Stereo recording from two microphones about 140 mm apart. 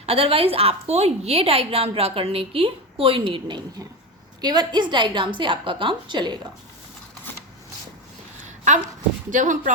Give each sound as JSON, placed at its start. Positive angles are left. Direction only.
{"t": 0.0, "sound": "a woman's voice", "side_deg": -45}
{"t": 9.3, "sound": "speech", "side_deg": -65}